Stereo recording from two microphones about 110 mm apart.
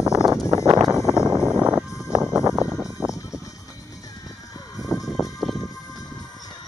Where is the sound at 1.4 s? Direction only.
10° right (ahead or behind).